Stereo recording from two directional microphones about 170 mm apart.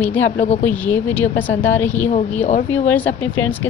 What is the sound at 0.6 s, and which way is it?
A woman's voice, 10° left (ahead or behind).